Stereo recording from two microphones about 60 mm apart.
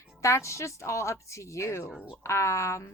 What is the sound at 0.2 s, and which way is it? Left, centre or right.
A woman's voice, left.